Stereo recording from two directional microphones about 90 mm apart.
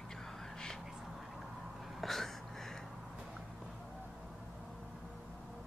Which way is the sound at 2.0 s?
Centre (ahead or behind).